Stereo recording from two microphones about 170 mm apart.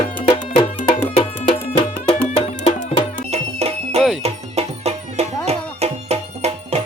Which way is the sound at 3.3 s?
40° right (ahead or behind).